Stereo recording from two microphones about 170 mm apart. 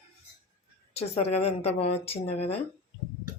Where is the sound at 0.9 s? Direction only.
35° left (ahead or behind).